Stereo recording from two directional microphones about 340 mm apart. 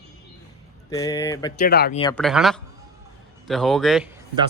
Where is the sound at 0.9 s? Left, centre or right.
Centre.